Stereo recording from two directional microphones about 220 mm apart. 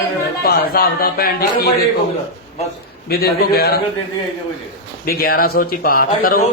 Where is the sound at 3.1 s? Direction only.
45° left (ahead or behind).